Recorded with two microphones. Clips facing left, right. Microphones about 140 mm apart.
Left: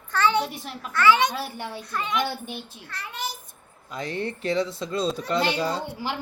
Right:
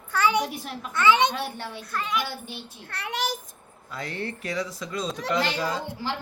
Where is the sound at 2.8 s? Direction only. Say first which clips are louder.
Right 6 dB; 65° right (ahead or behind); by 3.4 s 90° right.